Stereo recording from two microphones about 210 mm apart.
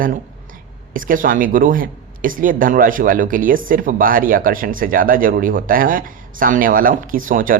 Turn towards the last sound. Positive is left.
turn(degrees=-40)  # may be behind; listen again after turning